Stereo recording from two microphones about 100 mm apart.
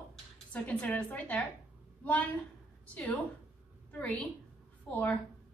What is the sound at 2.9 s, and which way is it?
Speech, 15° left (ahead or behind).